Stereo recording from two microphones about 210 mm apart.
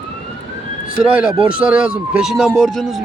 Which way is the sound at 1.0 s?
5° right (ahead or behind).